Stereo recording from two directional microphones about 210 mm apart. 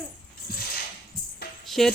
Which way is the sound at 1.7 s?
Centre (ahead or behind).